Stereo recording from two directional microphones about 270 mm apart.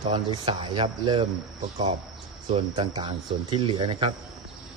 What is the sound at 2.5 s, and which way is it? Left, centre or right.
Speech, centre.